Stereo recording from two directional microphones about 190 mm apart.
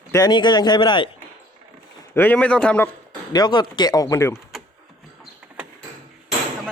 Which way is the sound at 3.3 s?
20° left (ahead or behind).